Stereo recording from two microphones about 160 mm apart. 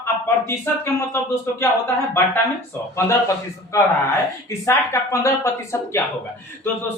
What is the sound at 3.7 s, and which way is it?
A man's voice, 20° left (ahead or behind).